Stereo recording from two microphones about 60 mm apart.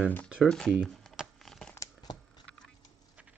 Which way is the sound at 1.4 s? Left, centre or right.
Centre.